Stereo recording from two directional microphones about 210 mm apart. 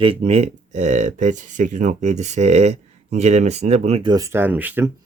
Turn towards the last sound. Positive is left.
turn(degrees=-10)  # may be behind; listen again after turning